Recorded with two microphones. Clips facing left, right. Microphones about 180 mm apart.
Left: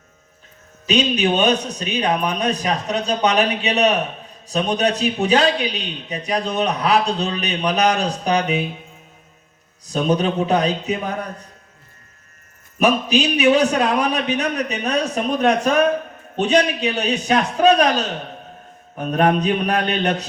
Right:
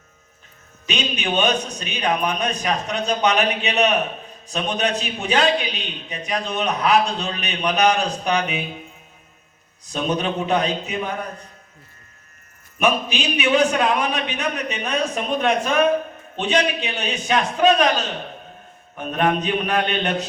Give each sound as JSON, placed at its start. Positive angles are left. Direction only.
{"t": 0.9, "sound": "a man's voice", "side_deg": 35}
{"t": 9.8, "sound": "a man's voice", "side_deg": 35}
{"t": 12.8, "sound": "a man's voice", "side_deg": 40}